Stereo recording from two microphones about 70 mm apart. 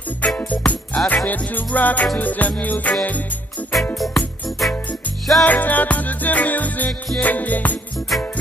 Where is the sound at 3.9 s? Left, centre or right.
Centre.